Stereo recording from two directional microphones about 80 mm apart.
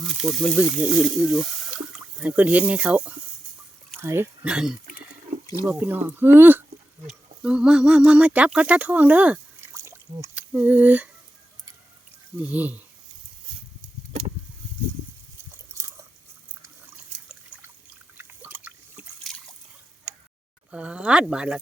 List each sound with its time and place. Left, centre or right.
0.0 s speech: centre
2.3 s speech: centre
4.0 s speech: right
4.4 s speech: centre
5.6 s speech: right
7.1 s speech: centre
9.6 s a sound: right
10.3 s speech: centre
12.4 s speech: right
17.5 s water: right
18.2 s drip: right
19.3 s a sound: centre
20.7 s speech: centre